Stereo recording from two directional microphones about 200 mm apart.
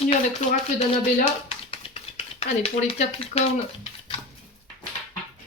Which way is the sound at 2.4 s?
30° left (ahead or behind).